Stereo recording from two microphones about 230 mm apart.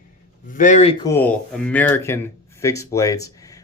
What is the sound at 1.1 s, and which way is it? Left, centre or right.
Speech, centre.